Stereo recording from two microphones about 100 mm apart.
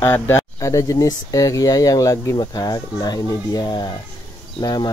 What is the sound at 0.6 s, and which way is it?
Speech, 35° left (ahead or behind).